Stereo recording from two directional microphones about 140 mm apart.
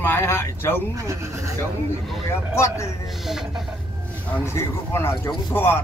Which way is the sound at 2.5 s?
20° left (ahead or behind).